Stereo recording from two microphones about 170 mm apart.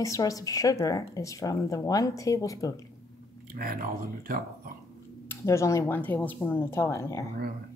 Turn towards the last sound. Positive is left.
turn(degrees=20)  # may be behind; listen again after turning